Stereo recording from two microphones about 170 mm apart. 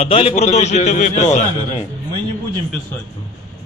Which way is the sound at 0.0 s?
35° left (ahead or behind).